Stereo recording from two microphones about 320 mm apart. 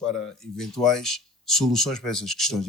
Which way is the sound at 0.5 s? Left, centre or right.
Centre.